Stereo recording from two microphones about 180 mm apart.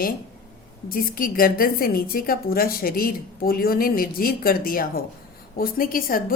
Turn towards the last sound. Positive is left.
turn(degrees=55)  # may be behind; listen again after turning